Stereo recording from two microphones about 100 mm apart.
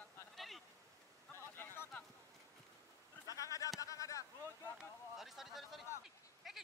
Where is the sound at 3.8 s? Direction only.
35° left (ahead or behind).